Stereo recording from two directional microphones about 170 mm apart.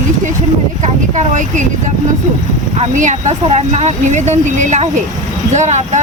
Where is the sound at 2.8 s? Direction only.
45° right (ahead or behind).